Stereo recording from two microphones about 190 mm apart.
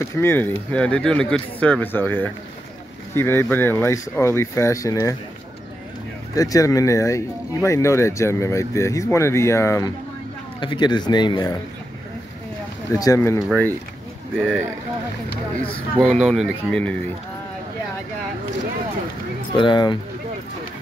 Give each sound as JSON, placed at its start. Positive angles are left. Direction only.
{"t": 0.0, "sound": "speech", "side_deg": 10}
{"t": 6.3, "sound": "speech", "side_deg": 20}
{"t": 12.9, "sound": "speech", "side_deg": 15}
{"t": 14.3, "sound": "speech", "side_deg": 0}
{"t": 15.6, "sound": "speech", "side_deg": 5}
{"t": 19.5, "sound": "speech", "side_deg": 25}